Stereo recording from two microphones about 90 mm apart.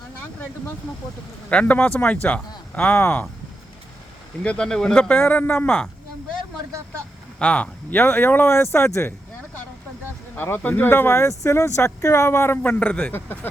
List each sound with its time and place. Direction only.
1.5 s speech: 15° left (ahead or behind)
4.4 s speech: 10° left (ahead or behind)
4.9 s speech: 20° left (ahead or behind)
7.3 s speech: 15° left (ahead or behind); by 9.1 s 30° left (ahead or behind)
10.3 s speech: 25° left (ahead or behind)